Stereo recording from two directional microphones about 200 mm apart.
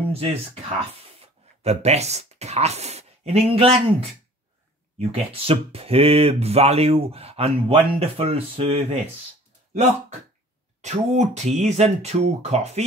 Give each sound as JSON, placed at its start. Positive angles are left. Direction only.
{"t": 0.1, "sound": "speech", "side_deg": -30}